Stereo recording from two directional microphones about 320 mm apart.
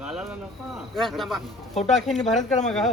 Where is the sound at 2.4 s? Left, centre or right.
Left.